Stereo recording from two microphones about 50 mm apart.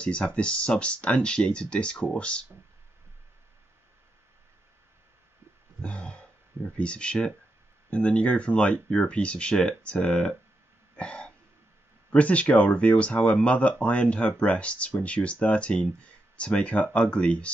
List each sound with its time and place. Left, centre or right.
0.0 s speech: left
5.8 s speech: left
11.0 s throat clearing: left
12.1 s speech: left